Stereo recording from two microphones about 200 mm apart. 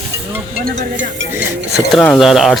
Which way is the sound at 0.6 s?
40° right (ahead or behind).